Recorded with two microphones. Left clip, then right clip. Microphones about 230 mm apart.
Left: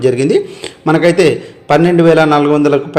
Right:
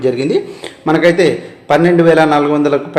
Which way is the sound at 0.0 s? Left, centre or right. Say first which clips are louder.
Left 3 dB; left.